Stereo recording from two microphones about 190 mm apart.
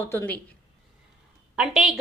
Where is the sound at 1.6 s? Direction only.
Centre (ahead or behind).